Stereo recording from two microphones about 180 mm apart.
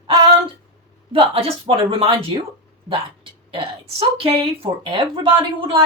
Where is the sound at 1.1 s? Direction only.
30° right (ahead or behind).